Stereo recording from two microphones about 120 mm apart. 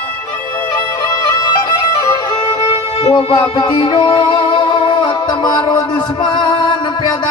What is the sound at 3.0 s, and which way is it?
Music, 40° left (ahead or behind).